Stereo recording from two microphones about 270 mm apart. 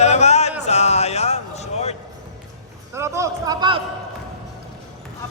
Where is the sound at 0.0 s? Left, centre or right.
Left.